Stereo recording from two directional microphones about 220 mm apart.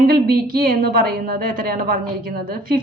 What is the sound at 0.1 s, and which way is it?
A woman's voice, 45° right (ahead or behind).